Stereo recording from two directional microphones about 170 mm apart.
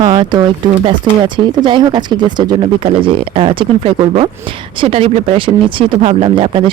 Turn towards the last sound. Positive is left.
turn(degrees=-30)  # may be behind; listen again after turning